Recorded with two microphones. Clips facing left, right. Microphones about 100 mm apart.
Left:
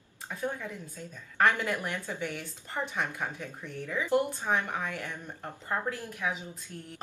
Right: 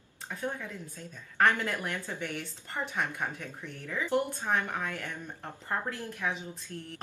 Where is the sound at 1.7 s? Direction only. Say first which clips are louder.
Left 2 dB; 15° left (ahead or behind).